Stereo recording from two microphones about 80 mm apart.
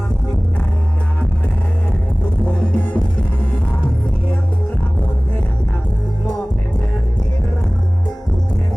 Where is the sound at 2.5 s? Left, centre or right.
Left.